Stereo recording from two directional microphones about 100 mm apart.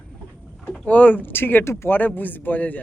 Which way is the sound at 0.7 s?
15° left (ahead or behind).